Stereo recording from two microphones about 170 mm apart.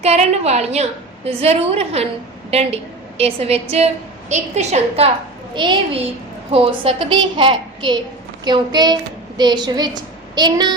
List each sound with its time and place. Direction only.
0.0 s a woman's voice: 40° right (ahead or behind)
5.5 s a child's voice: 30° right (ahead or behind)